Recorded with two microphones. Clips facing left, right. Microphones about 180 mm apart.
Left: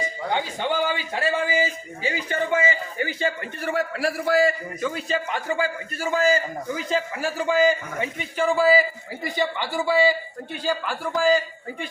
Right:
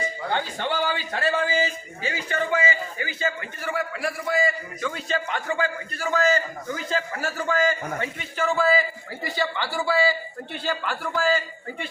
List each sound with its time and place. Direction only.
0.3 s a man's voice: 15° left (ahead or behind)
3.0 s a man's voice: 30° left (ahead or behind)
4.8 s a man's voice: 5° left (ahead or behind)